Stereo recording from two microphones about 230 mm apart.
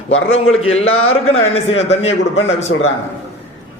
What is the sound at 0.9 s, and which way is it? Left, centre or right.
Speech, left.